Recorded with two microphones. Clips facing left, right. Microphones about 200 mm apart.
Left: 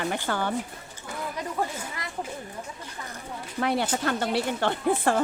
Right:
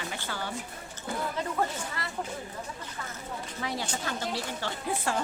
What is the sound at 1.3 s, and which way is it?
Speech, 15° left (ahead or behind).